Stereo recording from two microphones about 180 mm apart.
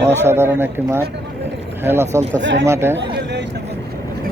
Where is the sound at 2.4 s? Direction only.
80° right.